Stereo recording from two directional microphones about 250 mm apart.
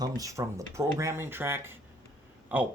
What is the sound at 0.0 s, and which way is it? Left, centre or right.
Speech, centre.